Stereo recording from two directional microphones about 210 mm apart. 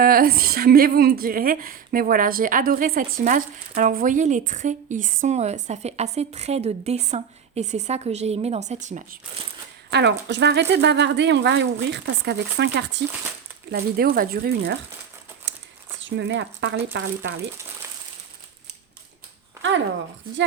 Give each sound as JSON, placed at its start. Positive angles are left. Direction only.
{"t": 0.0, "sound": "a woman's voice", "side_deg": -45}
{"t": 9.9, "sound": "speech", "side_deg": -55}
{"t": 16.0, "sound": "speech", "side_deg": -60}